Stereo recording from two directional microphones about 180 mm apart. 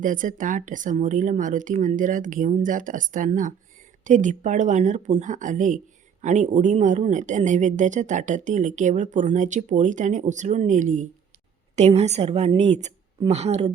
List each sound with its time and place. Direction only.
0.0 s a woman's voice: 45° right (ahead or behind)